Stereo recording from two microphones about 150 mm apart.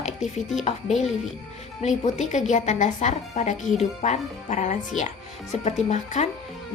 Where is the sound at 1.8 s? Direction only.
50° left (ahead or behind).